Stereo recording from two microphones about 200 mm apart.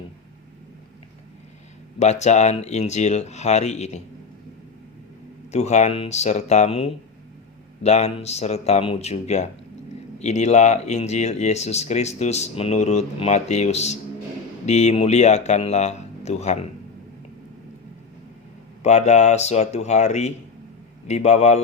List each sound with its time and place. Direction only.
2.0 s speech: 35° left (ahead or behind)
5.5 s speech: 35° left (ahead or behind)
18.8 s speech: 35° left (ahead or behind)